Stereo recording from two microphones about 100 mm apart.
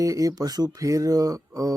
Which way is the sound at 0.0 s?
35° right (ahead or behind).